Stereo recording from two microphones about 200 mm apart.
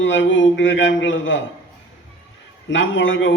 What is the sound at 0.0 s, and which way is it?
Speech, 70° left (ahead or behind).